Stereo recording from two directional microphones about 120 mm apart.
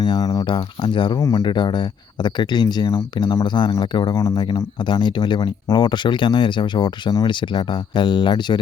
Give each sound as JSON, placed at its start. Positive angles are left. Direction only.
{"t": 0.0, "sound": "speech", "side_deg": 35}
{"t": 1.2, "sound": "speech", "side_deg": 30}
{"t": 1.5, "sound": "speech", "side_deg": 40}
{"t": 4.1, "sound": "speech", "side_deg": 25}
{"t": 4.9, "sound": "speech", "side_deg": 40}